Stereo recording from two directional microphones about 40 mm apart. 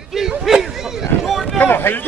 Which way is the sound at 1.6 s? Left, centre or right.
Left.